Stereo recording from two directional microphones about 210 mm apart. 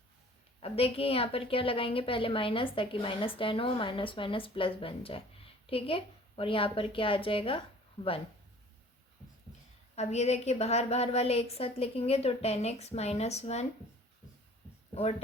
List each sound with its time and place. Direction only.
0.6 s a woman's voice: 30° left (ahead or behind)
9.9 s a woman's voice: 30° left (ahead or behind)